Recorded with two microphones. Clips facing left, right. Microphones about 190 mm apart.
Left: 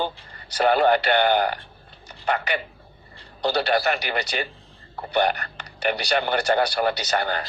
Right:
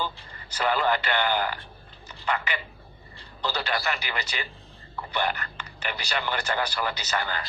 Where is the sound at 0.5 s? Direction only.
40° left (ahead or behind).